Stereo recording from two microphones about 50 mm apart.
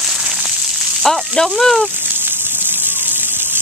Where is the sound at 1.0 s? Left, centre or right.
Centre.